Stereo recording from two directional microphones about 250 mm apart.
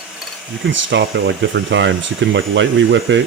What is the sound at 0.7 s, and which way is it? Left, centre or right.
Speech, right.